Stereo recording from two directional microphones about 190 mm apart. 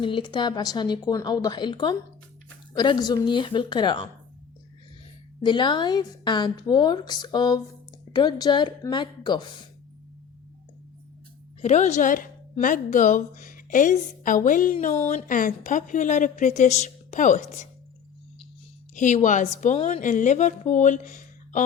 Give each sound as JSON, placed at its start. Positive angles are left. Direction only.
{"t": 0.0, "sound": "a woman's voice", "side_deg": 25}
{"t": 5.5, "sound": "a woman's voice", "side_deg": 25}
{"t": 11.6, "sound": "a woman's voice", "side_deg": 40}
{"t": 18.9, "sound": "a woman's voice", "side_deg": 40}